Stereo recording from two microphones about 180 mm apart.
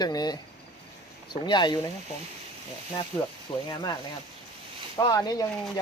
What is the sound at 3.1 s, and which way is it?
Speech, 35° left (ahead or behind).